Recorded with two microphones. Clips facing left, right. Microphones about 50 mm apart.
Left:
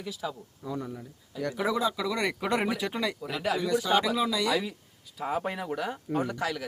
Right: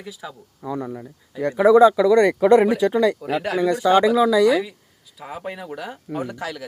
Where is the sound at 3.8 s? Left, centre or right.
Right.